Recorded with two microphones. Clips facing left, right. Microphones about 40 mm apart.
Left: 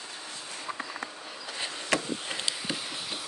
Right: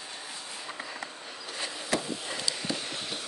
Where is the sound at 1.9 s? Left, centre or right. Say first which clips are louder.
Left 2 dB; left.